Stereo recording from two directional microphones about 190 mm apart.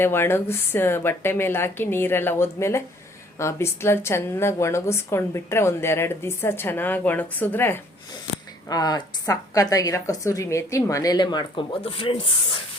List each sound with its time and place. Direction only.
0.0 s a woman's voice: 10° left (ahead or behind); by 12.1 s 30° left (ahead or behind)